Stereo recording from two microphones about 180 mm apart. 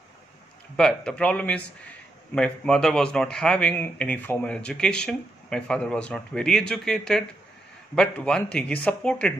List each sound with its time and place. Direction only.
0.7 s speech: 5° left (ahead or behind)